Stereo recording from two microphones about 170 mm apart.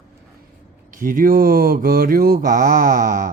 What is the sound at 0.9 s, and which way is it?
Mantra, 55° right (ahead or behind).